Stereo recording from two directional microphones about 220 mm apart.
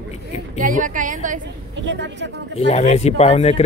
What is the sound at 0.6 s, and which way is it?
Speech, 35° right (ahead or behind).